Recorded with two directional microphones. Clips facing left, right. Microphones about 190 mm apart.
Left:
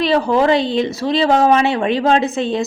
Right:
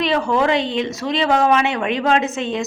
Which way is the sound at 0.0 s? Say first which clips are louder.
Left 3 dB; 35° left (ahead or behind).